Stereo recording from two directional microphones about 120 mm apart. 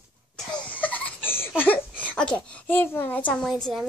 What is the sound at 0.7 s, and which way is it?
Baby laughter, 15° left (ahead or behind).